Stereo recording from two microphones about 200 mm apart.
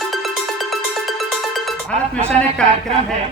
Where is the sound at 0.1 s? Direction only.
Centre (ahead or behind).